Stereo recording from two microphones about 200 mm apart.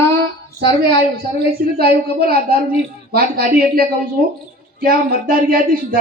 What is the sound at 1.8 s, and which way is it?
A woman's voice, 50° right (ahead or behind).